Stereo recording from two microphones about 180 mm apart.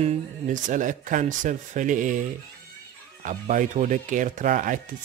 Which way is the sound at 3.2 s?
45° right (ahead or behind).